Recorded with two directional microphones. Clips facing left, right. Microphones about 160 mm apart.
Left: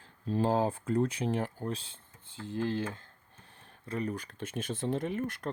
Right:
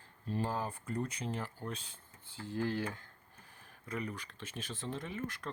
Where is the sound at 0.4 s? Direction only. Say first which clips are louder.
Left 13 dB; 90° left; by 1.5 s 65° left (ahead or behind).